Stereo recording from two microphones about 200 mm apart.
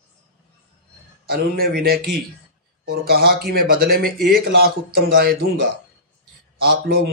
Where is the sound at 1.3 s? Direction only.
50° right (ahead or behind).